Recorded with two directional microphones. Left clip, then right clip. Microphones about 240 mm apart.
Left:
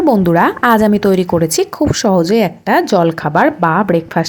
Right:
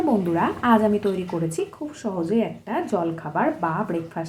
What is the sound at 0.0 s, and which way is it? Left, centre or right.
A woman's voice, left.